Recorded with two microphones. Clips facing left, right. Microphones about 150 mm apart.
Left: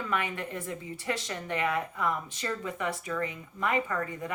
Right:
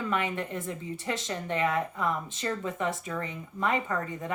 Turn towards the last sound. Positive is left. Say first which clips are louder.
# right 1 dB
turn(degrees=-25)  # may be behind; listen again after turning